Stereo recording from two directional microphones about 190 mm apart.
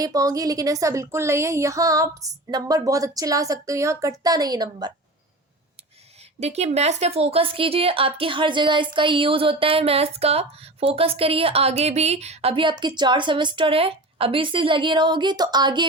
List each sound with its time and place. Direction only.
0.0 s a woman's voice: 20° right (ahead or behind)
6.4 s a woman's voice: 35° right (ahead or behind)